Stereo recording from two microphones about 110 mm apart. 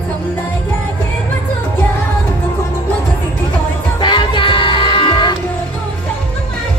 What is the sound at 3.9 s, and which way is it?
Music, 45° left (ahead or behind).